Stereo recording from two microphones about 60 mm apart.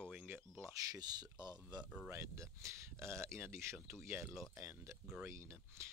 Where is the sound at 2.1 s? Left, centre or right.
Right.